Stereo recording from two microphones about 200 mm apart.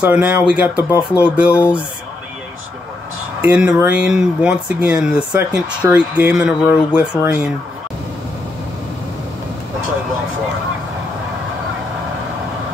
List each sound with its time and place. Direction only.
0.0 s speech: 10° right (ahead or behind)
0.7 s speech: 15° left (ahead or behind)
1.1 s speech: 5° right (ahead or behind)
3.3 s speech: 5° right (ahead or behind)